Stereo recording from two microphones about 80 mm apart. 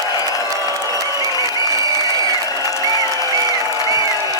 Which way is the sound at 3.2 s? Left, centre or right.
Right.